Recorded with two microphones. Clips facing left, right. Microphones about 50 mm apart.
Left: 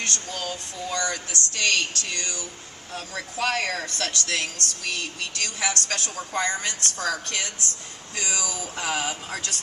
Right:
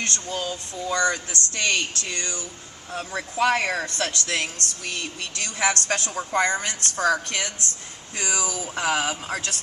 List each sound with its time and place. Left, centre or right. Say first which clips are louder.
0.0 s a woman's voice: right 2 dB; right